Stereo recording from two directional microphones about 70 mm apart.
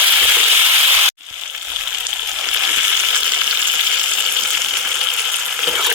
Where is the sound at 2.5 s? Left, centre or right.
Right.